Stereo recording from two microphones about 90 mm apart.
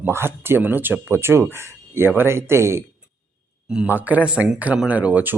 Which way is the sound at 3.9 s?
20° right (ahead or behind).